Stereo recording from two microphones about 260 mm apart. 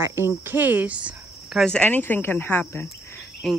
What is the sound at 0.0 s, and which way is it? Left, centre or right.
Speech, centre.